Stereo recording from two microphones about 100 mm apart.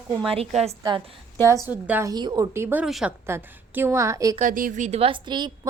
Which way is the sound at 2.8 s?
5° right (ahead or behind).